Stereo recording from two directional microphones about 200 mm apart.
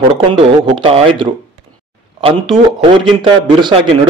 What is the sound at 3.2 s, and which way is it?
Speech, 25° right (ahead or behind).